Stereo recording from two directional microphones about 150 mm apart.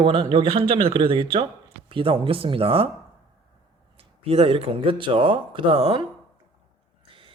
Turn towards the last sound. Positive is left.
turn(degrees=-35)  # may be behind; listen again after turning